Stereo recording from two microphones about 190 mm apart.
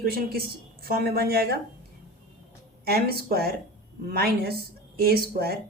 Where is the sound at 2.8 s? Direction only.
55° right (ahead or behind).